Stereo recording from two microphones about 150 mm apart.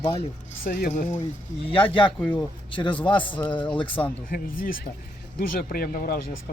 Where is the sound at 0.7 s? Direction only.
75° left (ahead or behind); by 1.2 s 60° left (ahead or behind).